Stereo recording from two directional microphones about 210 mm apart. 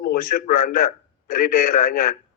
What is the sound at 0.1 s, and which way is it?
A man's voice, 45° left (ahead or behind).